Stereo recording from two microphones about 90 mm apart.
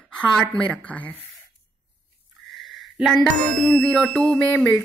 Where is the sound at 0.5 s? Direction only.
15° left (ahead or behind).